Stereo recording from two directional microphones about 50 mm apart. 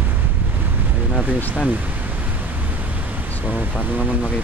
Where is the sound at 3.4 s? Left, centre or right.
Right.